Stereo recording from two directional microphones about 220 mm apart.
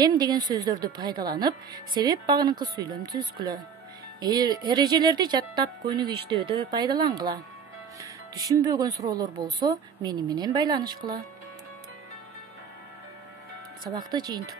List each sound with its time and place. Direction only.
0.0 s speech: 20° right (ahead or behind)
8.0 s music: 15° right (ahead or behind)
8.6 s speech: 15° right (ahead or behind)
14.1 s speech: 20° right (ahead or behind)